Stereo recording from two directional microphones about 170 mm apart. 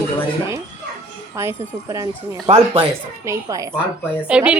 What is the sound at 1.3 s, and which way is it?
Speech, 15° right (ahead or behind).